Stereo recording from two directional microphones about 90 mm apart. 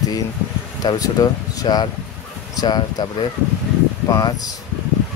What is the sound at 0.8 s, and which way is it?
Speech, 40° left (ahead or behind).